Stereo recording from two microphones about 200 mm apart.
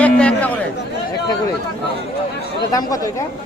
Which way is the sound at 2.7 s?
15° left (ahead or behind).